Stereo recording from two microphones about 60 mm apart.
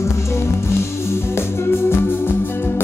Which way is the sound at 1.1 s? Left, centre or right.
Left.